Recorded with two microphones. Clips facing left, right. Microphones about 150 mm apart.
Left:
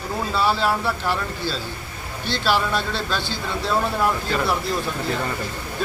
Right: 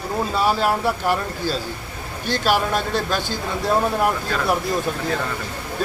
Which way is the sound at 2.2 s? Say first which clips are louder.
Right 2 dB; 45° right (ahead or behind).